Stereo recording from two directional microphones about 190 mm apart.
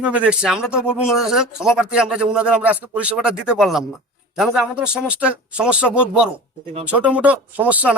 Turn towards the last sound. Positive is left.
turn(degrees=-10)  # may be behind; listen again after turning